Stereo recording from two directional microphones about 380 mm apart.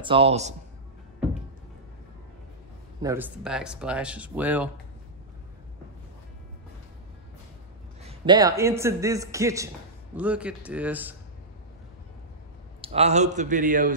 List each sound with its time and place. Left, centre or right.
0.0 s a man's voice: centre
3.0 s speech: centre
8.0 s a man's voice: centre
12.8 s a man's voice: centre